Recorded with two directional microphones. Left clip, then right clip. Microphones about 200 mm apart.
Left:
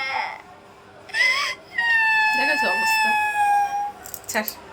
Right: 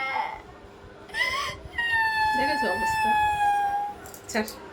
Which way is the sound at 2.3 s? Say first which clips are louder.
Left 4 dB; 5° left (ahead or behind).